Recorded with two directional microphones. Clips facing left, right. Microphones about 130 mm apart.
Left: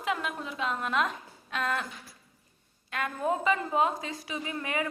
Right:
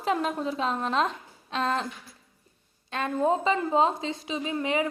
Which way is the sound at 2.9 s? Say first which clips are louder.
Right 5 dB; 30° right (ahead or behind).